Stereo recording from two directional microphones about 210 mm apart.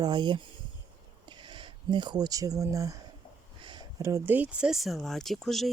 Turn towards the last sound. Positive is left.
turn(degrees=0)  # may be behind; listen again after turning